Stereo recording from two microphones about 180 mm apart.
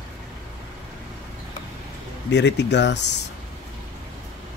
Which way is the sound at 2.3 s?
75° left (ahead or behind).